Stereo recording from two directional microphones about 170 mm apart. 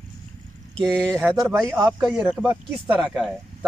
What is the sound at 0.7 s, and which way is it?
Speech, 5° left (ahead or behind).